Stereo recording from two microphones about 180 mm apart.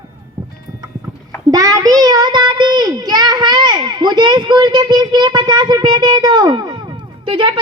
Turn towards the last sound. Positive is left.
turn(degrees=-25)  # may be behind; listen again after turning